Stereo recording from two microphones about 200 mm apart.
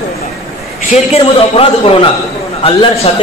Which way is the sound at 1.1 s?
30° left (ahead or behind).